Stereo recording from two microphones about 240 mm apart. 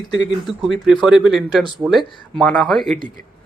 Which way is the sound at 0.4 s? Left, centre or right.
Centre.